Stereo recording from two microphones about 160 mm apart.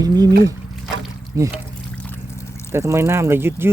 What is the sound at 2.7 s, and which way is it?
Speech, 15° right (ahead or behind).